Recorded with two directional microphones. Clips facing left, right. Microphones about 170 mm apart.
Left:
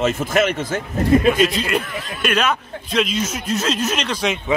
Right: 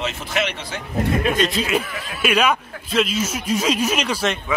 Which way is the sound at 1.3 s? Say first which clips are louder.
Left 2 dB; centre (ahead or behind).